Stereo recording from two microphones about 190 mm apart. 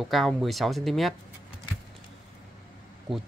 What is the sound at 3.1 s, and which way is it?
Speech, centre (ahead or behind).